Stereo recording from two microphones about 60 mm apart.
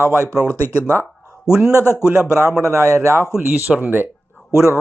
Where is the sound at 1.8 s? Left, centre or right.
Left.